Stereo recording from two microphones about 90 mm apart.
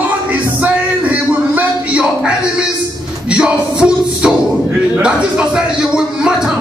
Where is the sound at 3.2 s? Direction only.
10° right (ahead or behind).